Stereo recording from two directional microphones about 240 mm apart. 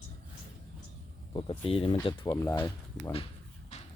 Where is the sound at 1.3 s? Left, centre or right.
Left.